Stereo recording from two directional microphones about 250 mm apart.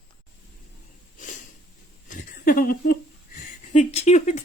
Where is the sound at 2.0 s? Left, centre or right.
Left.